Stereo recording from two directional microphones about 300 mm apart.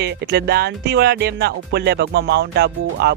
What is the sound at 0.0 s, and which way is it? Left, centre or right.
Speech, right.